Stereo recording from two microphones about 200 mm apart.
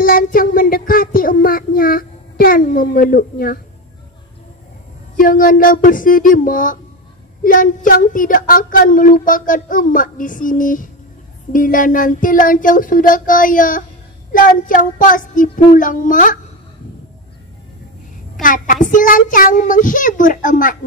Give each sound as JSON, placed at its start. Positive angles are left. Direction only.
{"t": 0.0, "sound": "child singing", "side_deg": 45}
{"t": 5.1, "sound": "a woman's voice", "side_deg": 45}
{"t": 18.4, "sound": "a child's voice", "side_deg": 40}